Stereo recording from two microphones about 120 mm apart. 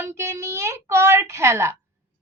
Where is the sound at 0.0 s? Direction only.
20° right (ahead or behind).